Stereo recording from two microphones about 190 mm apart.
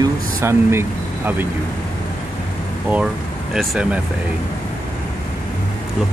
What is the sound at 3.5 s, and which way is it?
Speech, centre (ahead or behind).